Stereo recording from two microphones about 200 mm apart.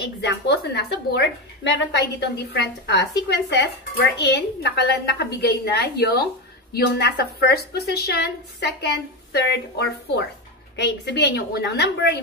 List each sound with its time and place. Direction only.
0.2 s a woman's voice: 55° left (ahead or behind)